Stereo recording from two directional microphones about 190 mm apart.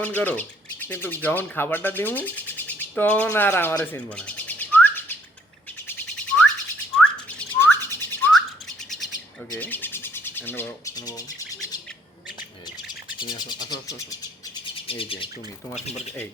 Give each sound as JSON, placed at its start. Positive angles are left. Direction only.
{"t": 0.0, "sound": "speech", "side_deg": 10}
{"t": 5.9, "sound": "bird", "side_deg": 5}
{"t": 9.6, "sound": "bird", "side_deg": 10}
{"t": 13.1, "sound": "speech", "side_deg": 20}
{"t": 14.8, "sound": "speech", "side_deg": 30}